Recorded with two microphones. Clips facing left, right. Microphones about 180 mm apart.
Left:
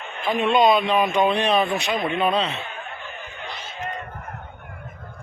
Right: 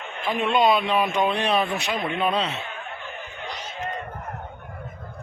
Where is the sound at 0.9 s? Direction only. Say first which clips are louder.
Left 3 dB; 10° left (ahead or behind).